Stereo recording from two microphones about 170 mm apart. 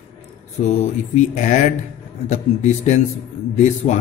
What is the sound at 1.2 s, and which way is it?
A man's voice, 45° left (ahead or behind).